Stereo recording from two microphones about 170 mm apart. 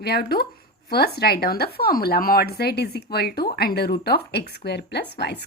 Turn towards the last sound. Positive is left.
turn(degrees=75)  # may be behind; listen again after turning